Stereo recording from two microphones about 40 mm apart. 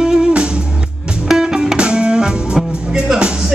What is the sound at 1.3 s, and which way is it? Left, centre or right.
Music, centre.